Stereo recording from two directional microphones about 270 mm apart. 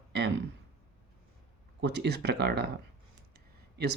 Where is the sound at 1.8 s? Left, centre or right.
Right.